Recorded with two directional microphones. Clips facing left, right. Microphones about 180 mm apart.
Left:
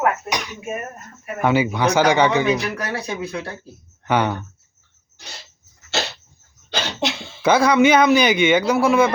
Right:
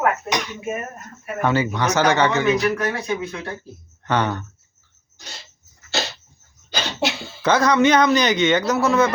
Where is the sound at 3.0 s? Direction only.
35° left (ahead or behind).